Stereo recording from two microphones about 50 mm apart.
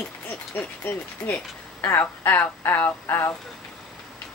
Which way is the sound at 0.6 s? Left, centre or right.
Left.